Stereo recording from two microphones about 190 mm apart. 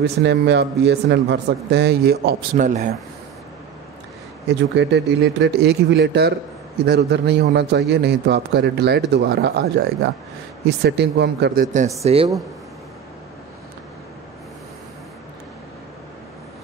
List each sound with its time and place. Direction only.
0.0 s speech: 60° right (ahead or behind)
2.5 s speech: 40° right (ahead or behind)
4.5 s speech: 65° right (ahead or behind)
10.8 s speech: 65° right (ahead or behind)
11.6 s speech: 40° right (ahead or behind)